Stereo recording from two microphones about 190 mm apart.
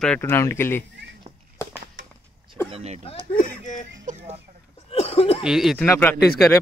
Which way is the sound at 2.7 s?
35° right (ahead or behind).